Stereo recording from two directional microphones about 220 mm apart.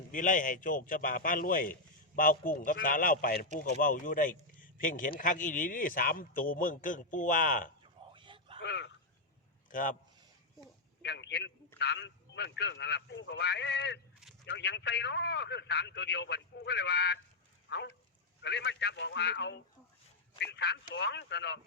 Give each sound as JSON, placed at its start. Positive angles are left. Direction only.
{"t": 0.1, "sound": "a man's voice", "side_deg": 35}
{"t": 8.1, "sound": "a sound", "side_deg": -20}
{"t": 8.6, "sound": "a man's voice", "side_deg": 55}
{"t": 9.6, "sound": "a man's voice", "side_deg": 35}
{"t": 11.0, "sound": "a man's voice", "side_deg": 50}
{"t": 17.7, "sound": "a sound", "side_deg": 50}
{"t": 18.4, "sound": "a man's voice", "side_deg": 50}